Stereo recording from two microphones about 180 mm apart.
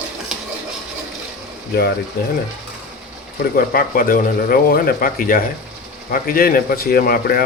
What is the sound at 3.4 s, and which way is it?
A man's voice, 55° left (ahead or behind).